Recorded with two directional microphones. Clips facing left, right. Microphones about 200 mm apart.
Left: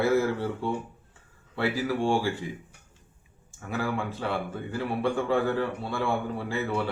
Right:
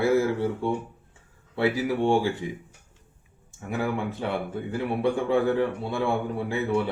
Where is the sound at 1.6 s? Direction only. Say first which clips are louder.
Right 3 dB; 20° right (ahead or behind).